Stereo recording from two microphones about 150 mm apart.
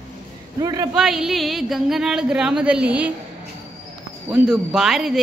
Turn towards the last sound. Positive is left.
turn(degrees=0)  # may be behind; listen again after turning